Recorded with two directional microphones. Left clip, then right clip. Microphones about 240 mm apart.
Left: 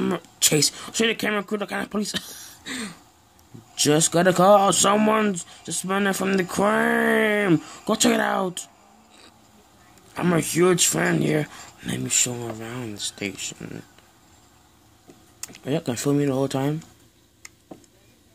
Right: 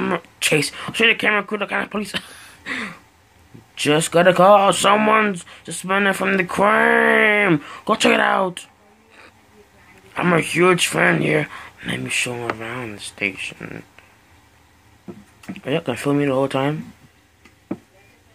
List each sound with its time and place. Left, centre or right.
0.0 s speech: left
4.1 s speech: left
10.1 s speech: left
15.6 s speech: left